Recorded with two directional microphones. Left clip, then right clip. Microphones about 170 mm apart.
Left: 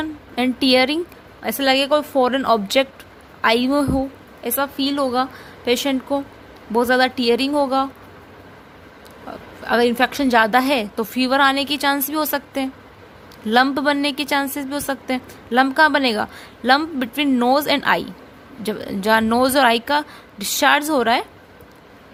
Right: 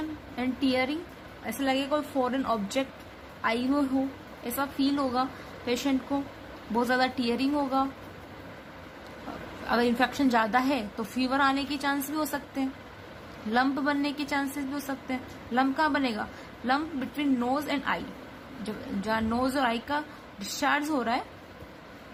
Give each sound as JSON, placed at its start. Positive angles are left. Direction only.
{"t": 0.3, "sound": "a woman's voice", "side_deg": 60}
{"t": 9.6, "sound": "a woman's voice", "side_deg": 45}